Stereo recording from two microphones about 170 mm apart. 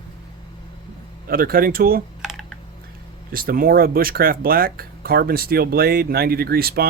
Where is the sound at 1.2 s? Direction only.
60° right (ahead or behind).